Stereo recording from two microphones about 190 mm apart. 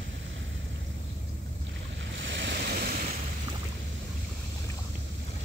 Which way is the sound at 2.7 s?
50° right (ahead or behind).